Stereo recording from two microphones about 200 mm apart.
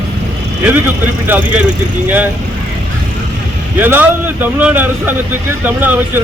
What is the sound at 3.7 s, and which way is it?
A man's voice, 10° right (ahead or behind).